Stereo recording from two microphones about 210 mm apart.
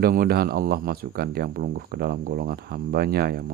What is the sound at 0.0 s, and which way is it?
Speech, 45° right (ahead or behind).